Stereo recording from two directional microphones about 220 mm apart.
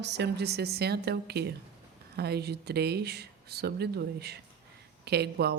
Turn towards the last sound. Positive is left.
turn(degrees=-45)  # may be behind; listen again after turning